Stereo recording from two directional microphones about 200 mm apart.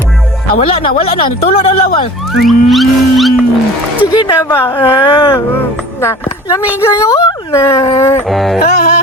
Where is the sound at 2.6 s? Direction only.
Centre (ahead or behind).